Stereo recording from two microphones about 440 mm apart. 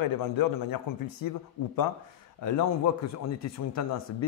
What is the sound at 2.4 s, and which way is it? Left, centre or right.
Speech, left.